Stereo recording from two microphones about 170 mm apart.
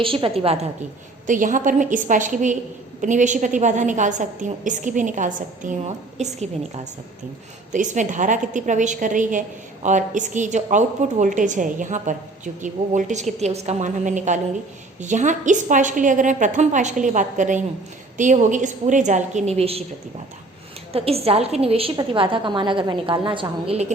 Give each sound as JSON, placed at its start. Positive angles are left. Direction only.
{"t": 0.0, "sound": "a woman's voice", "side_deg": -30}
{"t": 1.3, "sound": "a woman's voice", "side_deg": -50}
{"t": 7.7, "sound": "a woman's voice", "side_deg": -45}
{"t": 20.9, "sound": "a woman's voice", "side_deg": -35}